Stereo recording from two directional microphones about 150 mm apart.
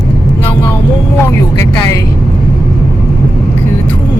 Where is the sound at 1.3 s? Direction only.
20° left (ahead or behind).